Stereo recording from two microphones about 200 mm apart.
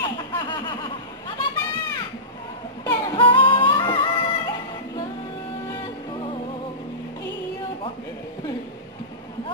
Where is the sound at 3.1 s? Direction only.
25° left (ahead or behind).